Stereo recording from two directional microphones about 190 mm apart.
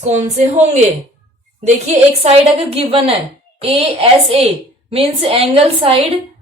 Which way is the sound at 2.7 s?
30° right (ahead or behind).